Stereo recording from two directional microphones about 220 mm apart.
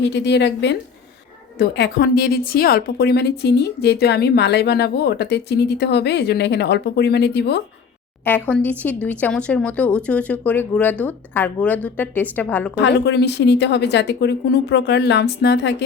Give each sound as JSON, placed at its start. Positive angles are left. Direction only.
{"t": 0.0, "sound": "a woman's voice", "side_deg": 50}
{"t": 8.2, "sound": "speech", "side_deg": 5}
{"t": 12.7, "sound": "a woman's voice", "side_deg": 50}